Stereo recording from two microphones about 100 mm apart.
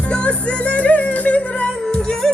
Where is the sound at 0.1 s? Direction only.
10° left (ahead or behind).